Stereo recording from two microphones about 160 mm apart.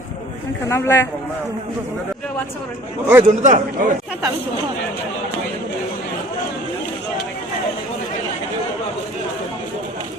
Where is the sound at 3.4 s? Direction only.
50° right (ahead or behind).